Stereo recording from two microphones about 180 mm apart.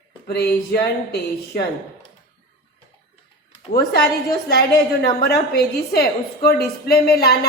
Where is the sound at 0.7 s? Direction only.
60° left (ahead or behind).